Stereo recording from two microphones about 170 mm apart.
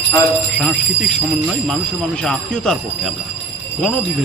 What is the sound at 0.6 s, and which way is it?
Speech, 5° left (ahead or behind).